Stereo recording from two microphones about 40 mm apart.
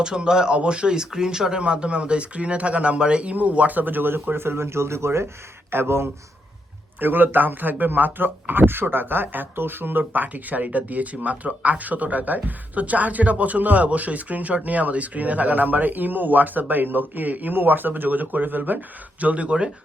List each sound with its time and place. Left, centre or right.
0.0 s speech: centre
3.3 s speech: right
7.0 s speech: right
10.0 s speech: right